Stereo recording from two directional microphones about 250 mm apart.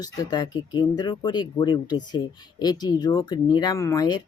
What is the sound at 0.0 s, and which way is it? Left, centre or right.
Speech, centre.